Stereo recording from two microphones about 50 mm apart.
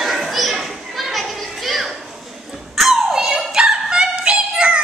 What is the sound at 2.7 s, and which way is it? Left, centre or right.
Dog, centre.